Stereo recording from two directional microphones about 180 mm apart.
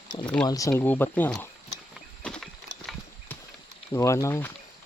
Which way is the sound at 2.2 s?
5° left (ahead or behind).